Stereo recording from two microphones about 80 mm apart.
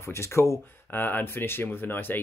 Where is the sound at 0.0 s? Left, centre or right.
Left.